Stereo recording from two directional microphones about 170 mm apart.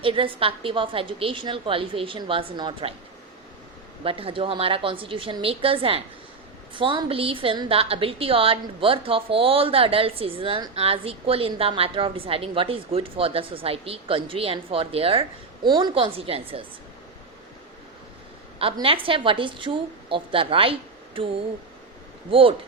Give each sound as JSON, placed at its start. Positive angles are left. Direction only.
{"t": 0.0, "sound": "a woman's voice", "side_deg": -30}
{"t": 4.0, "sound": "a woman's voice", "side_deg": -30}
{"t": 18.6, "sound": "a woman's voice", "side_deg": -30}
{"t": 22.3, "sound": "a woman's voice", "side_deg": -30}